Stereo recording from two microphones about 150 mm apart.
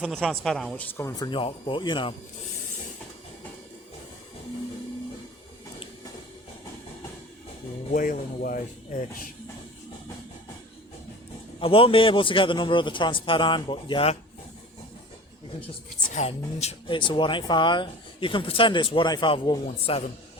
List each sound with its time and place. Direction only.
0.1 s speech: centre (ahead or behind); by 1.3 s 20° left (ahead or behind)
1.3 s speech: 35° left (ahead or behind)
7.9 s speech: 65° left (ahead or behind)
11.6 s speech: 35° left (ahead or behind)
16.1 s speech: 45° left (ahead or behind)
17.0 s speech: 35° left (ahead or behind)
19.6 s speech: 40° left (ahead or behind)